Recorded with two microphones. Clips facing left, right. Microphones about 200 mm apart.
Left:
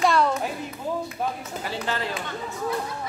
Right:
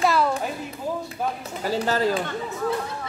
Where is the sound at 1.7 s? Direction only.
40° right (ahead or behind).